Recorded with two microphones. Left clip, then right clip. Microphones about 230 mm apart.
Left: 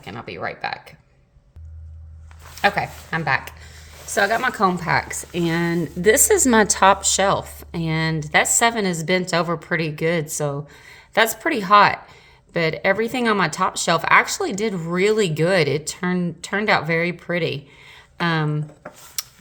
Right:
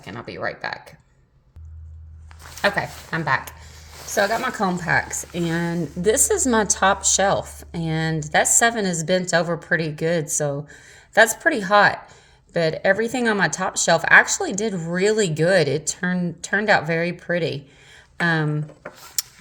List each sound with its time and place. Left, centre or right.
0.0 s speech: left
2.6 s speech: left
5.1 s speech: left
5.5 s speech: left
19.2 s a sound: centre